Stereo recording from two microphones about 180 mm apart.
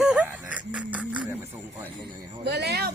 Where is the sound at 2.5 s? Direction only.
70° right (ahead or behind).